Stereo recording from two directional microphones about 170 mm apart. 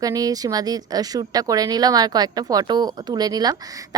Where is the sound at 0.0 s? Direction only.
20° right (ahead or behind).